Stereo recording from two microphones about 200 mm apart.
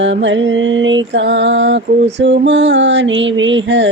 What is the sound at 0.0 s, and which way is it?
Mantra, 65° right (ahead or behind).